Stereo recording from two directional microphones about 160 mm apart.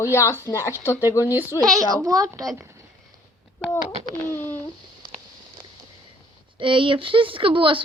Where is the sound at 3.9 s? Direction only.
50° right (ahead or behind).